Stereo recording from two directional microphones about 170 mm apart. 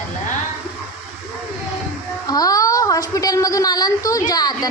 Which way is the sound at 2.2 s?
20° left (ahead or behind).